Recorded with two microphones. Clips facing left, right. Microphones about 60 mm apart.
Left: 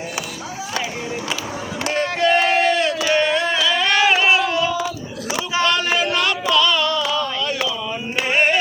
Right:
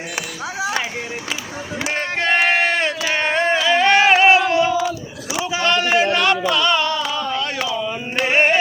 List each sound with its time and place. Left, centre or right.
1.9 s crowd: right
3.1 s a sound: right
8.3 s music: right